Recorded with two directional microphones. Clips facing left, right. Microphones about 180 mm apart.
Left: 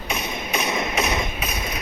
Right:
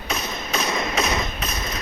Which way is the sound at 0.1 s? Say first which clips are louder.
Even; 15° left (ahead or behind).